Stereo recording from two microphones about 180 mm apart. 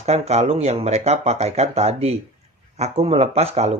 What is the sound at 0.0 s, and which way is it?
Speech, 35° right (ahead or behind).